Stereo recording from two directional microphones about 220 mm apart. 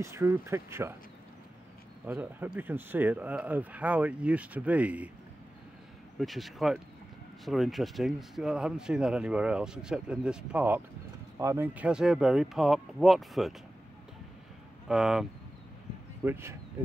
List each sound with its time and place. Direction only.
0.0 s speech: 10° right (ahead or behind)
2.0 s speech: 5° right (ahead or behind)
6.1 s speech: centre (ahead or behind)
14.9 s speech: centre (ahead or behind)
16.3 s speech: 10° right (ahead or behind)